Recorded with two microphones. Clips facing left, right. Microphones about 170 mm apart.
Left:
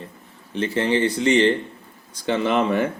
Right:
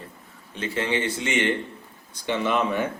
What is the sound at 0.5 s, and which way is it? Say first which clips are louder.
Speech: left 5 dB; 30° left (ahead or behind).